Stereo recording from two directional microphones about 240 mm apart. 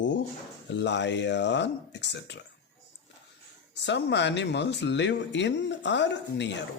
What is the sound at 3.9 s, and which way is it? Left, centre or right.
Speech, left.